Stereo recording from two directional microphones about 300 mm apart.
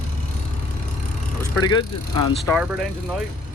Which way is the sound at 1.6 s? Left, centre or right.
Centre.